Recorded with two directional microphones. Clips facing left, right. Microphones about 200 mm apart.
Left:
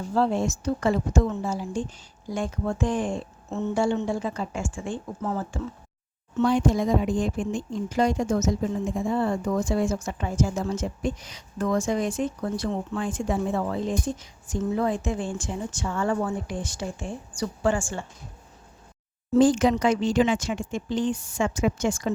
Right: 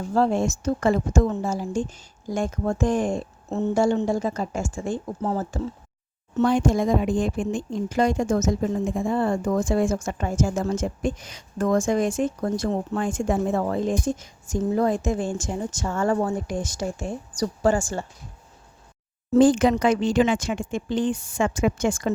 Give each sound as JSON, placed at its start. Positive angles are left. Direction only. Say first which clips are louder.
{"t": 0.1, "sound": "speech", "louder": "right 2 dB", "side_deg": -45}
{"t": 19.3, "sound": "speech", "louder": "right 2 dB", "side_deg": -55}